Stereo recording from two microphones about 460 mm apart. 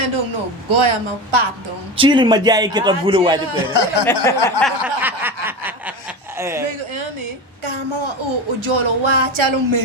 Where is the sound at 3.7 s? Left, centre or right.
Left.